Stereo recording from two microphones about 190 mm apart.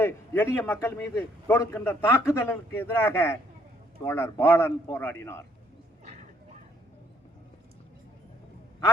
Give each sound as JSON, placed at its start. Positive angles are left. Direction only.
{"t": 0.0, "sound": "a man's voice", "side_deg": 10}